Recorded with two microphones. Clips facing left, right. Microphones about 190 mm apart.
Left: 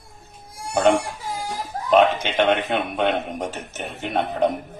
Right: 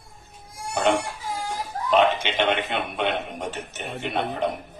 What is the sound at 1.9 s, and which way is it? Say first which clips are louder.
A man's voice: left 3 dB; 45° left (ahead or behind).